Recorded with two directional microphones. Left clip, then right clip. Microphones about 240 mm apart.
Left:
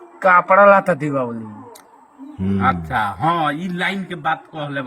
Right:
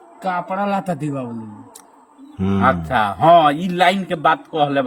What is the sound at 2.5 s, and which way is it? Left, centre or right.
A man's voice, right.